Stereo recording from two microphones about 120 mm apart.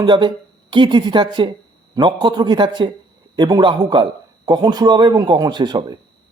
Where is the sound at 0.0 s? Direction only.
35° right (ahead or behind).